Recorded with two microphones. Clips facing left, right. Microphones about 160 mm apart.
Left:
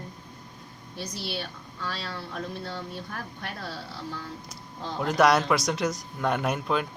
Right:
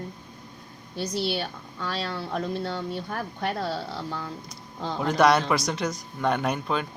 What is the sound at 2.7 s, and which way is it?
Speech, 90° right.